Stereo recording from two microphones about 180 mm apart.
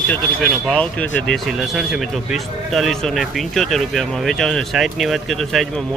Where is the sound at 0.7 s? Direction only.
5° left (ahead or behind).